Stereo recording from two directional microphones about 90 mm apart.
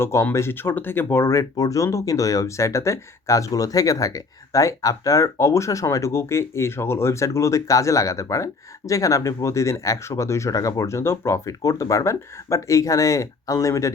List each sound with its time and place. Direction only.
0.0 s speech: 30° left (ahead or behind)